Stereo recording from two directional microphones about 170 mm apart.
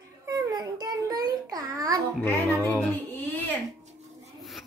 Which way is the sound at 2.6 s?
10° left (ahead or behind).